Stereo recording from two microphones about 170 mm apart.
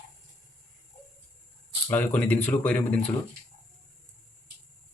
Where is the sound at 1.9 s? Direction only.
10° left (ahead or behind).